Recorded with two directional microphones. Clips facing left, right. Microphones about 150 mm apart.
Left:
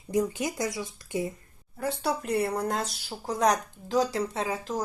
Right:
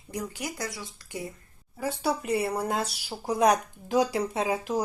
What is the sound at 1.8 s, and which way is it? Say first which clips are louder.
A woman's voice: right 1 dB; centre (ahead or behind).